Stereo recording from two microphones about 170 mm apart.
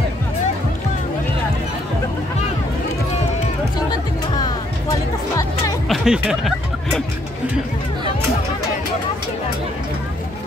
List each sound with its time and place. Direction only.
5.3 s music: 20° left (ahead or behind)
5.9 s music: 5° right (ahead or behind)